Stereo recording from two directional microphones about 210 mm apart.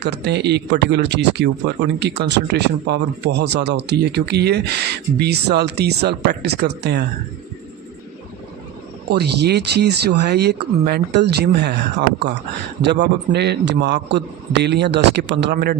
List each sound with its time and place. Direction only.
0.0 s speech: 55° right (ahead or behind)
9.0 s speech: 50° right (ahead or behind)
12.8 s speech: 55° right (ahead or behind)